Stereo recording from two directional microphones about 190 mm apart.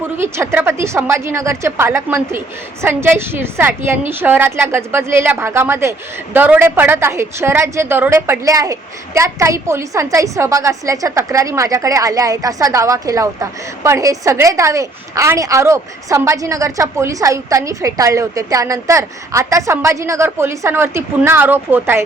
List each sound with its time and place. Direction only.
0.2 s a woman's voice: 15° right (ahead or behind)